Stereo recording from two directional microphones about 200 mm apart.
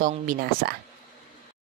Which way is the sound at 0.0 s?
45° right (ahead or behind).